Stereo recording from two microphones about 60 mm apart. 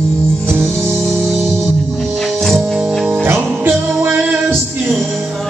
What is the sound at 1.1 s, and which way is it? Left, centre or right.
Music, centre.